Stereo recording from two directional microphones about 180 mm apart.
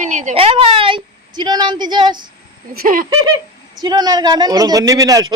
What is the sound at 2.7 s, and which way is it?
Speech, 55° right (ahead or behind).